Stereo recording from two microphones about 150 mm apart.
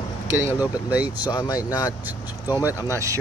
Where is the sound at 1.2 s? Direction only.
25° left (ahead or behind).